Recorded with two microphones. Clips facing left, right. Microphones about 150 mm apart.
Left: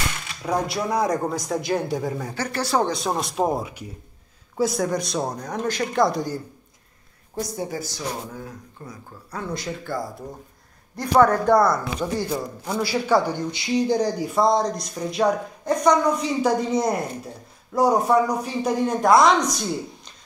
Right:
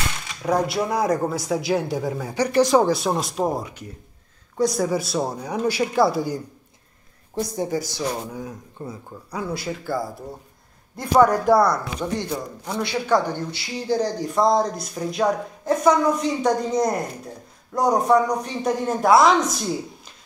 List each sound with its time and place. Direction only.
0.5 s speech: 5° right (ahead or behind)
2.9 s speech: centre (ahead or behind)
7.3 s a woman's voice: 30° right (ahead or behind)
8.3 s speech: 15° right (ahead or behind)
8.8 s a woman's voice: 25° right (ahead or behind)
9.3 s speech: 10° right (ahead or behind)